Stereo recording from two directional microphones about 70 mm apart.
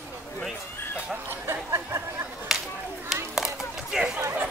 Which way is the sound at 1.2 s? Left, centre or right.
Right.